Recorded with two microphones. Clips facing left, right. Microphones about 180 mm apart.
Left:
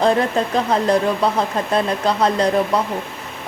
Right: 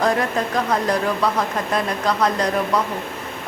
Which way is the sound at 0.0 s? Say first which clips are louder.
Left 3 dB; 30° left (ahead or behind).